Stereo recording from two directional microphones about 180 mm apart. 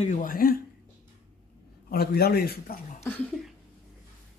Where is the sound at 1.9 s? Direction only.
60° left (ahead or behind).